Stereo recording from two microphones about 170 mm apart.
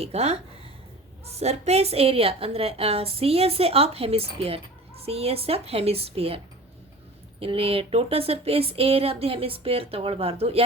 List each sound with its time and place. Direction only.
0.0 s speech: 40° right (ahead or behind)
1.4 s speech: 40° right (ahead or behind)